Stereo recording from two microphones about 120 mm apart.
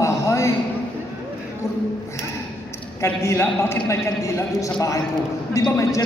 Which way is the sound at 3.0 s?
25° left (ahead or behind).